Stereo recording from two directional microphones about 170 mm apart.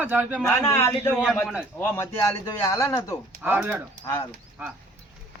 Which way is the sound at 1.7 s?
15° left (ahead or behind).